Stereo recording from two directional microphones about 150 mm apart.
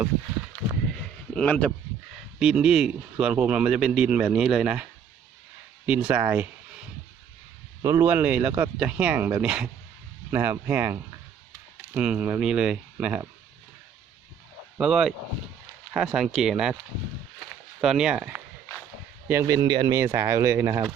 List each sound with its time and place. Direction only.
1.3 s speech: 10° left (ahead or behind)
2.4 s speech: 5° right (ahead or behind)
7.8 s speech: 20° right (ahead or behind)
14.8 s speech: 5° right (ahead or behind)
17.7 s speech: 5° right (ahead or behind)
19.3 s speech: 20° right (ahead or behind)